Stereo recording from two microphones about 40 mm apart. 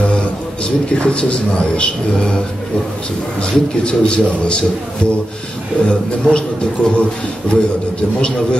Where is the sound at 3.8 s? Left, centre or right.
Left.